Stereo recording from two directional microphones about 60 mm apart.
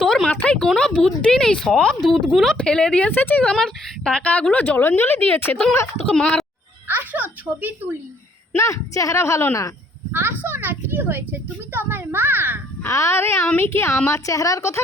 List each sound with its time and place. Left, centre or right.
0.0 s a sound: centre
0.4 s speech: centre
3.1 s speech: left
3.5 s speech: centre
4.2 s speech: left
6.1 s speech: centre
6.8 s a sound: right
8.5 s a woman's voice: left
10.1 s a woman's voice: right
12.9 s speech: left
14.1 s a woman's voice: left